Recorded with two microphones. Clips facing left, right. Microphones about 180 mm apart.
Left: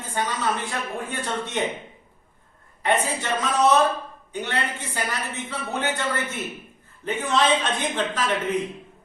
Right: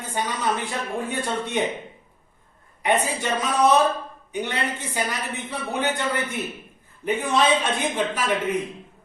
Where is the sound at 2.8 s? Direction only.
15° right (ahead or behind).